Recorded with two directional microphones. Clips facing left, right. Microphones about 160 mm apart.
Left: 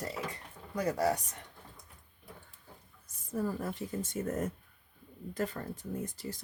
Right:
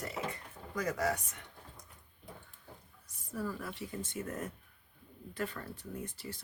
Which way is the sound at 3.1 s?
45° left (ahead or behind).